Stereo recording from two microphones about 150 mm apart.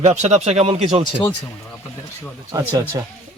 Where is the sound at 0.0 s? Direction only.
50° right (ahead or behind).